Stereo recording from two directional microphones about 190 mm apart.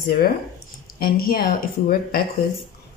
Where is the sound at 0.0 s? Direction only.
50° left (ahead or behind).